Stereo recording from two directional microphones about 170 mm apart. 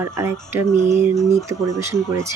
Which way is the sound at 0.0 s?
15° right (ahead or behind).